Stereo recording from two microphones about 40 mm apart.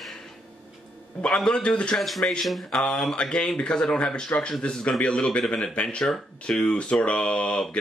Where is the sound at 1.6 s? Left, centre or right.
Left.